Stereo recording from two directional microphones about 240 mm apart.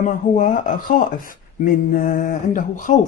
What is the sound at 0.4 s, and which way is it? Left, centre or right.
Speech, left.